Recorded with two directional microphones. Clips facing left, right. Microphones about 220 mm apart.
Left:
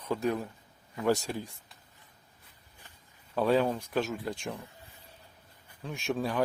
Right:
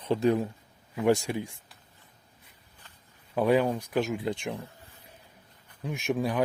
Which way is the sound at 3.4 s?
10° right (ahead or behind).